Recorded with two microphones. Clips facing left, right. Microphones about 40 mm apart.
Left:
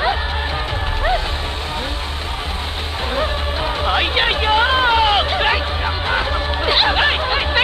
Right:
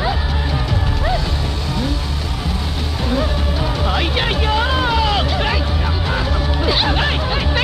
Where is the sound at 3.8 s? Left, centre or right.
Left.